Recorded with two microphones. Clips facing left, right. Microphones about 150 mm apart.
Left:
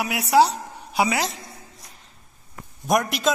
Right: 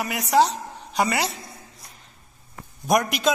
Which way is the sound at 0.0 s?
10° left (ahead or behind).